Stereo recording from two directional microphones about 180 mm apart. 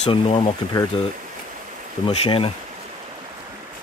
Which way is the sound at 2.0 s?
35° left (ahead or behind).